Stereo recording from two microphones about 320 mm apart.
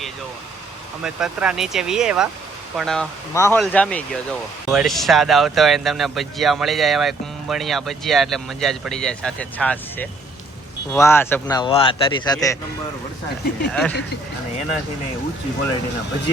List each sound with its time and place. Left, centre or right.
1.0 s speech: centre
13.7 s speech: centre